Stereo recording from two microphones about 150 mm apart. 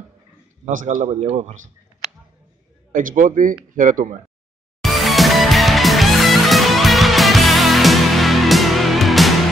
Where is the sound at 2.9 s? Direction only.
60° right (ahead or behind).